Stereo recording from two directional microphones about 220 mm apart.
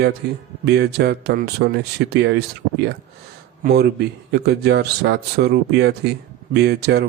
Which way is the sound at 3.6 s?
45° right (ahead or behind).